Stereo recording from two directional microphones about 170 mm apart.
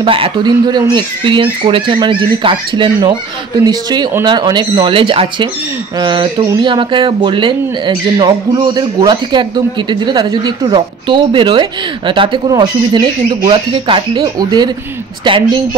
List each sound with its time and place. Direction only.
0.0 s speech: 30° right (ahead or behind)